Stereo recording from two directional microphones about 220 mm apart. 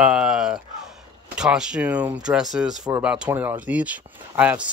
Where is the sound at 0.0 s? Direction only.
5° right (ahead or behind).